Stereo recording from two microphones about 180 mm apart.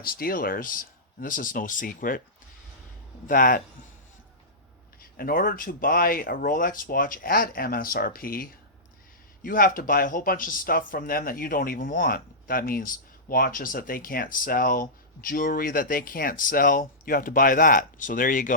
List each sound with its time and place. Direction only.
0.0 s speech: 55° left (ahead or behind)
3.2 s speech: 50° left (ahead or behind)
5.1 s speech: 55° left (ahead or behind)